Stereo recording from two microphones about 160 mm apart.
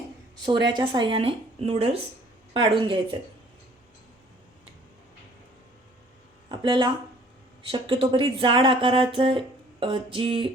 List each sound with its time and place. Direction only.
0.3 s speech: 25° right (ahead or behind)
6.5 s speech: 30° right (ahead or behind)